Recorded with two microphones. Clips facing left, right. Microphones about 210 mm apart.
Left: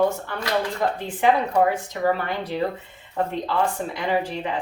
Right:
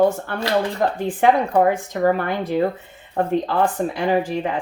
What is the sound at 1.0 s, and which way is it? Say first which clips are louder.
Speech: right 4 dB; 50° right (ahead or behind).